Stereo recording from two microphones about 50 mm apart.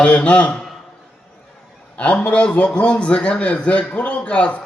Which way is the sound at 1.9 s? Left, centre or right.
Left.